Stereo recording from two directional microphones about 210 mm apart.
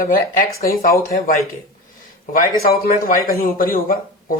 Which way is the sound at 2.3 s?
45° left (ahead or behind).